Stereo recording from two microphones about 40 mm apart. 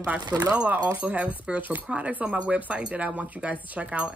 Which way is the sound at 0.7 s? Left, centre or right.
Right.